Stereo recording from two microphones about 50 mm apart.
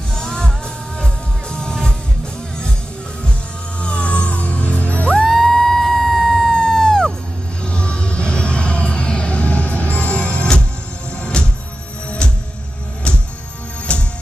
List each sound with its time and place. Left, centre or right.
0.2 s music: centre
3.8 s music: left
5.2 s music: centre
6.5 s a sound: centre
7.6 s music: left
13.9 s music: left